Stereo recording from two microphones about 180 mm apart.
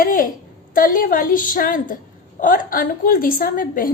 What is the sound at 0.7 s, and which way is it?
A woman's voice, 50° left (ahead or behind).